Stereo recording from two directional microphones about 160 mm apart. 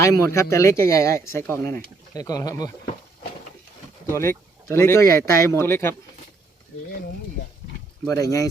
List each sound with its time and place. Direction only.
0.0 s speech: 20° left (ahead or behind)
4.1 s speech: 15° left (ahead or behind)
8.0 s speech: 20° left (ahead or behind)